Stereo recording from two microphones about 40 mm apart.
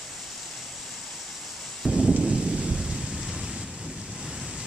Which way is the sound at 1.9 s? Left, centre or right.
Centre.